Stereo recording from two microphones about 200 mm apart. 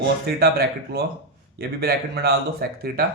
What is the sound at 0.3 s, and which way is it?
Speech, 50° right (ahead or behind).